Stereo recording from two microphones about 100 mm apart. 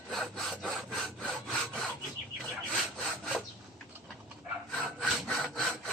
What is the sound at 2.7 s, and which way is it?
Sawing, 5° left (ahead or behind).